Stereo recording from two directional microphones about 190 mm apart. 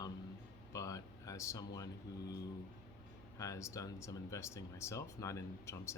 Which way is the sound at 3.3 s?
15° left (ahead or behind).